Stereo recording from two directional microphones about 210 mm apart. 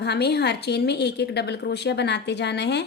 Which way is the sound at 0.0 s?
50° left (ahead or behind).